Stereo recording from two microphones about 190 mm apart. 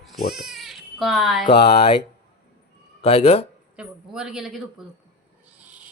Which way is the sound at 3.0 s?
30° left (ahead or behind).